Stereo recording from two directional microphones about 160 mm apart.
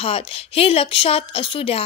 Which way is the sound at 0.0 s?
35° left (ahead or behind).